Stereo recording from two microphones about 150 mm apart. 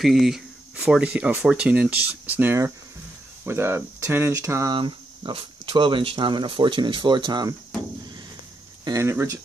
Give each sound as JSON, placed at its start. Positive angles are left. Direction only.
{"t": 0.0, "sound": "speech", "side_deg": 0}
{"t": 4.7, "sound": "speech", "side_deg": -35}
{"t": 8.8, "sound": "speech", "side_deg": -20}